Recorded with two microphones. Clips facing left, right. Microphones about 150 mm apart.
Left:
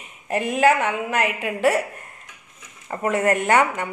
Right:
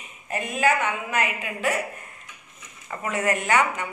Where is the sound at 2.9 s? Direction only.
50° left (ahead or behind).